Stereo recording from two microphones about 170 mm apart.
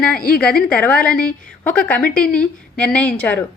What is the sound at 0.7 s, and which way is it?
A woman's voice, 10° left (ahead or behind).